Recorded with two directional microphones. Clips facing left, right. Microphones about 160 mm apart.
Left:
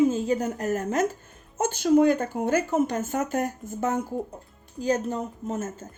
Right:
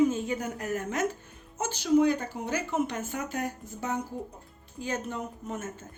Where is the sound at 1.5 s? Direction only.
50° left (ahead or behind).